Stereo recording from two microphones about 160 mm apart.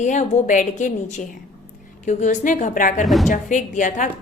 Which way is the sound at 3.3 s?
55° left (ahead or behind).